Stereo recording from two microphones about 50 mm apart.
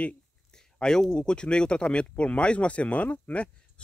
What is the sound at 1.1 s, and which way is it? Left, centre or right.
Speech, centre.